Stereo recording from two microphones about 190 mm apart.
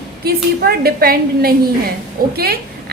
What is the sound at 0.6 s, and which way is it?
A woman's voice, 55° right (ahead or behind).